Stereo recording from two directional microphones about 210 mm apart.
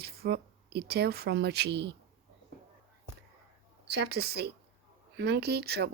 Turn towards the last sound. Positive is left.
turn(degrees=-50)  # may be behind; listen again after turning